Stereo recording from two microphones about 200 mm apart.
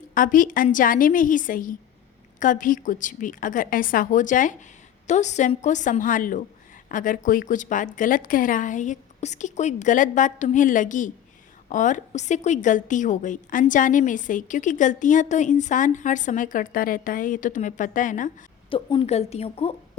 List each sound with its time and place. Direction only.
0.1 s a woman's voice: 40° left (ahead or behind)
18.7 s a woman's voice: 25° left (ahead or behind)